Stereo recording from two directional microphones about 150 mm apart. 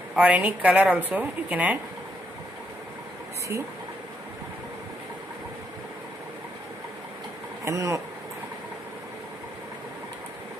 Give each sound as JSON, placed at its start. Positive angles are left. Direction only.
{"t": 0.1, "sound": "a woman's voice", "side_deg": -10}
{"t": 7.6, "sound": "speech", "side_deg": -20}